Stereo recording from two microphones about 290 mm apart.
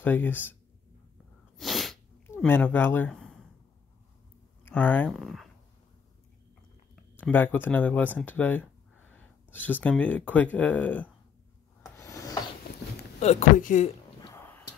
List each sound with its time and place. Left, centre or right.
0.0 s speech: centre
1.6 s sneeze: centre
4.6 s speech: centre
7.2 s speech: centre
11.8 s wood: centre
13.2 s speech: left
14.2 s a sound: centre